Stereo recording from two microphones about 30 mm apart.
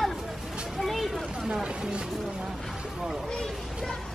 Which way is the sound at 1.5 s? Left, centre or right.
Right.